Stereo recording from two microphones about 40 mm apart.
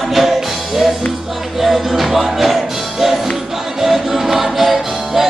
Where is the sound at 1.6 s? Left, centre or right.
Centre.